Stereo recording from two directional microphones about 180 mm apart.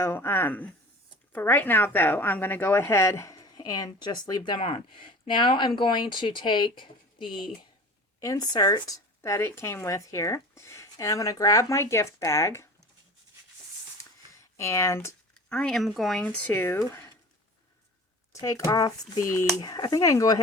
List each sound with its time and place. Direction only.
0.0 s a woman's voice: 15° left (ahead or behind)
14.0 s speech: 15° left (ahead or behind)
18.3 s a woman's voice: 15° left (ahead or behind)